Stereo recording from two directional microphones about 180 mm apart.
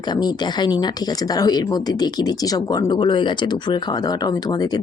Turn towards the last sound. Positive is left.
turn(degrees=20)  # may be behind; listen again after turning